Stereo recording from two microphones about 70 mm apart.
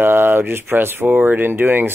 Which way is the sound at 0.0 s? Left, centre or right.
Right.